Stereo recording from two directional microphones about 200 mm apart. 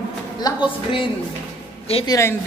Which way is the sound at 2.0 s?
15° left (ahead or behind).